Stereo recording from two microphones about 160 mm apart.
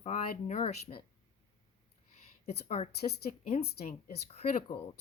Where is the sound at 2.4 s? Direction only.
40° left (ahead or behind).